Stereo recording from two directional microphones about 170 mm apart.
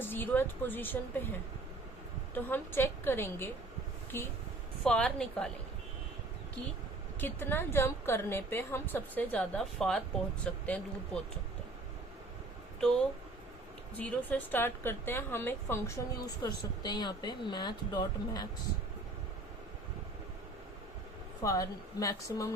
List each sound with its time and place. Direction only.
0.0 s a woman's voice: 10° left (ahead or behind)
2.3 s a woman's voice: 10° left (ahead or behind)
7.2 s a woman's voice: 10° left (ahead or behind)
14.0 s a woman's voice: 10° left (ahead or behind)
21.4 s a woman's voice: 20° left (ahead or behind)